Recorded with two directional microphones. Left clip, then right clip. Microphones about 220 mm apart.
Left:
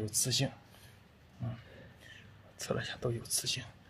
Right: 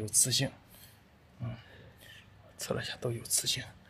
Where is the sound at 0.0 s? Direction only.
5° right (ahead or behind).